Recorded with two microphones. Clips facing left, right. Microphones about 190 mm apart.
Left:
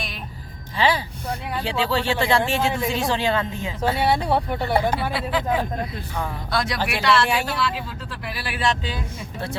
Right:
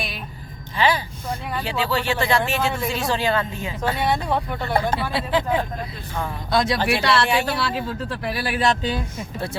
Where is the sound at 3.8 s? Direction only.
10° left (ahead or behind).